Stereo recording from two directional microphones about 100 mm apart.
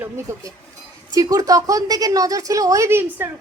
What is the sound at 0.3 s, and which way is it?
A woman's voice, 25° right (ahead or behind).